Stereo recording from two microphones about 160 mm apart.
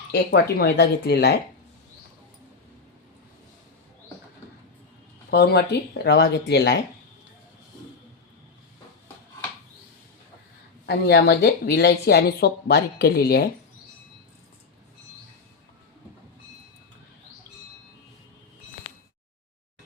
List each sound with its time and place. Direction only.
0.1 s speech: 80° left
5.3 s speech: 90° left
10.8 s speech: 90° left